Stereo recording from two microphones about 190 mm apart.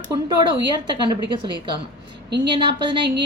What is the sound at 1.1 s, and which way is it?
A woman's voice, 25° right (ahead or behind).